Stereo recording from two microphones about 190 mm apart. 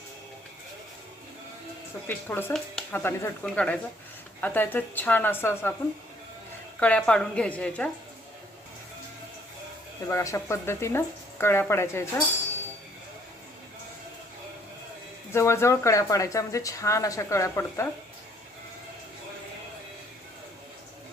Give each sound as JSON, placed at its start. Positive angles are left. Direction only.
{"t": 2.0, "sound": "speech", "side_deg": 10}
{"t": 6.7, "sound": "speech", "side_deg": 5}
{"t": 10.1, "sound": "speech", "side_deg": 15}
{"t": 15.3, "sound": "speech", "side_deg": 15}